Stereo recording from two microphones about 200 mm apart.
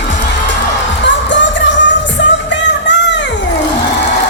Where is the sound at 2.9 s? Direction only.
65° left (ahead or behind).